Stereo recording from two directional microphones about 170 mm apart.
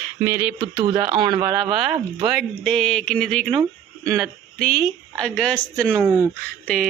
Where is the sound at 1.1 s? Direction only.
25° right (ahead or behind).